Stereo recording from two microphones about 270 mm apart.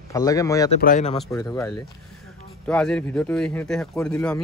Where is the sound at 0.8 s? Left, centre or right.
Left.